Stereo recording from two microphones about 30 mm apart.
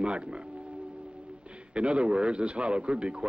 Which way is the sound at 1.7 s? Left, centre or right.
Right.